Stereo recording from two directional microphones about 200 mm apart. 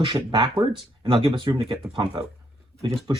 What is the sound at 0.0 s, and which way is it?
Speech, 25° right (ahead or behind).